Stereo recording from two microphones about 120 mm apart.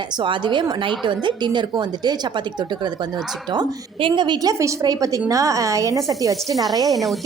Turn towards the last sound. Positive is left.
turn(degrees=0)  # may be behind; listen again after turning